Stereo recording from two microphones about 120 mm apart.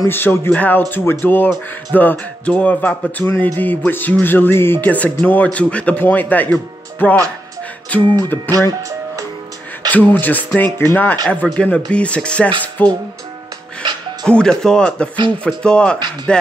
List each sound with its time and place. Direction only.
0.1 s speech: 20° left (ahead or behind)
9.8 s speech: 15° left (ahead or behind)
14.2 s speech: 5° left (ahead or behind)